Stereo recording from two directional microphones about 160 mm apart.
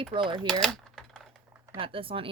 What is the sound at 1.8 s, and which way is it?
Speech, 35° right (ahead or behind).